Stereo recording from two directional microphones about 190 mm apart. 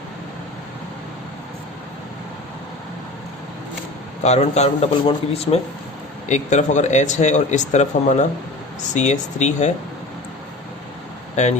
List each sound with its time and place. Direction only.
4.2 s speech: 35° left (ahead or behind)
11.4 s speech: 40° left (ahead or behind)